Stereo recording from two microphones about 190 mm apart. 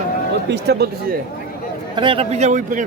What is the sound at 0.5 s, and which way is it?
Speech, 60° right (ahead or behind).